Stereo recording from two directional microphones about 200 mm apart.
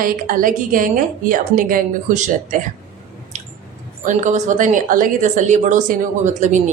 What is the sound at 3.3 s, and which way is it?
Squish, 35° right (ahead or behind).